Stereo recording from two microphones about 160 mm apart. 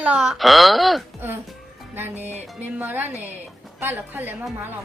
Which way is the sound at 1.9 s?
15° right (ahead or behind).